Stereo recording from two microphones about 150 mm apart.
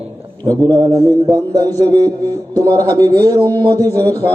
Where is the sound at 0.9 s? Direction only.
25° right (ahead or behind).